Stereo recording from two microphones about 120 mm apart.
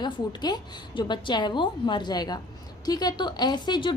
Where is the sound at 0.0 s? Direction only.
40° left (ahead or behind).